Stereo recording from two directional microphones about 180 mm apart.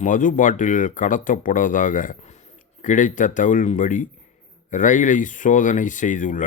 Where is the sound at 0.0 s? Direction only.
45° left (ahead or behind).